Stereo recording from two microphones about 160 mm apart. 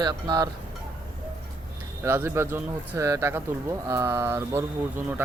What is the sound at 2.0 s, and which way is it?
Speech, 15° right (ahead or behind).